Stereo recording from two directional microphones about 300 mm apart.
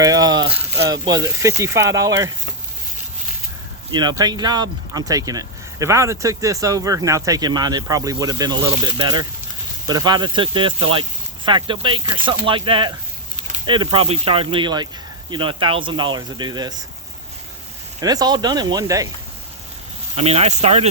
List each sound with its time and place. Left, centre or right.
0.0 s speech: centre
3.9 s speech: centre
18.0 s speech: centre
20.1 s speech: right